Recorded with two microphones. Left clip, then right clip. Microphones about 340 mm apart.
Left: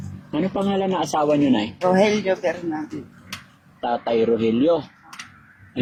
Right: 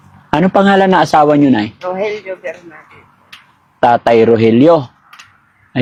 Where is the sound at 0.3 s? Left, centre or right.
Right.